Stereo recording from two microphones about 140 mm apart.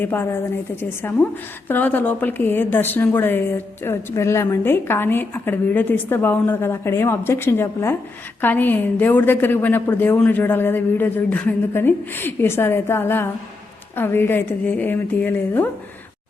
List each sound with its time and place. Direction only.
0.0 s a woman's voice: 15° left (ahead or behind)